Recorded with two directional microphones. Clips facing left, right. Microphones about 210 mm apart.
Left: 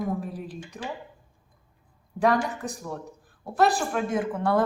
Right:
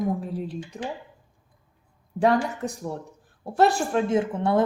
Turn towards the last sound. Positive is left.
turn(degrees=-25)  # may be behind; listen again after turning